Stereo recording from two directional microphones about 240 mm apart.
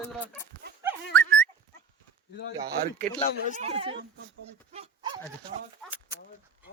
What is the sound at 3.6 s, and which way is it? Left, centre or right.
Speech, right.